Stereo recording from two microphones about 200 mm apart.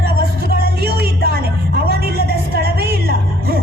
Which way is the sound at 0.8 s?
50° right (ahead or behind).